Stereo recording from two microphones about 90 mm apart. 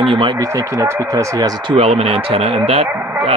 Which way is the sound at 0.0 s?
80° right.